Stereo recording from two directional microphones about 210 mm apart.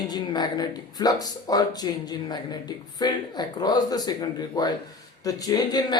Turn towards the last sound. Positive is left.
turn(degrees=20)  # may be behind; listen again after turning